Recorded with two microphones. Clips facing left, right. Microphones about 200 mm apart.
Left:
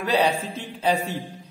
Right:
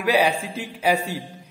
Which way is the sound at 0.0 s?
10° right (ahead or behind).